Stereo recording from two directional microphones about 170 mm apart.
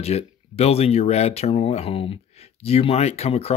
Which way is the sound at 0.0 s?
40° left (ahead or behind).